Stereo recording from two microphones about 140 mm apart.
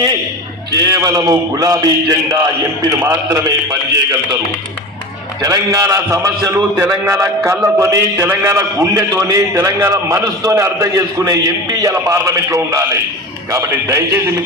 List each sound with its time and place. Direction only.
0.9 s a man's voice: 25° right (ahead or behind)
5.4 s a man's voice: 25° right (ahead or behind)